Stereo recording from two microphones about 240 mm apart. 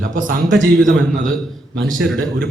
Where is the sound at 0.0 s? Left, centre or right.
Right.